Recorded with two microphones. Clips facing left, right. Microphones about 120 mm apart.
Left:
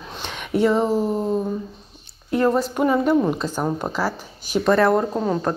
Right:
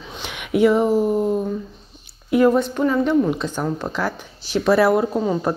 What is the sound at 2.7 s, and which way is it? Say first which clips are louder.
A woman's voice: even; 10° left (ahead or behind).